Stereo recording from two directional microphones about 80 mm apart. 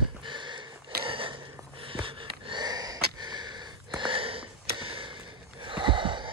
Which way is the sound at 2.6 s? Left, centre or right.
Right.